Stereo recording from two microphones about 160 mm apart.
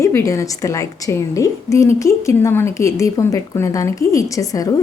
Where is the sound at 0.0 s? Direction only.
20° left (ahead or behind).